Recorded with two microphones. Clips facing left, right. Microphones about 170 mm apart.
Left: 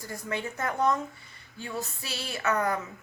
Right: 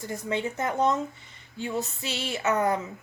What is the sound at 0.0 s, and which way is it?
Speech, 20° right (ahead or behind).